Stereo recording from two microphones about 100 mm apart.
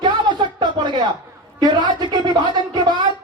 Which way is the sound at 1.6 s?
45° right (ahead or behind).